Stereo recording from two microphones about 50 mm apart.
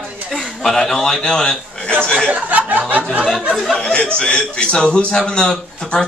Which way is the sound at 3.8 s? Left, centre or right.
Left.